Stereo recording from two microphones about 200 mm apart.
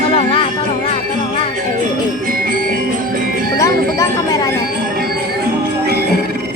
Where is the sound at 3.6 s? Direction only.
20° left (ahead or behind).